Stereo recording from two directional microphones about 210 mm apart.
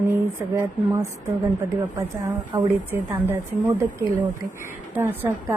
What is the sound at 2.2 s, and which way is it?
A woman's voice, 15° right (ahead or behind).